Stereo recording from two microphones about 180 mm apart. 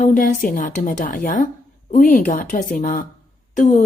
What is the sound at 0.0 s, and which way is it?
A woman's voice, 45° left (ahead or behind).